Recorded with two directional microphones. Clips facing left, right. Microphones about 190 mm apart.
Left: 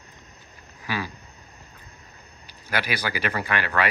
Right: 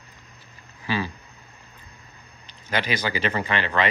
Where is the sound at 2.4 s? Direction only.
10° left (ahead or behind).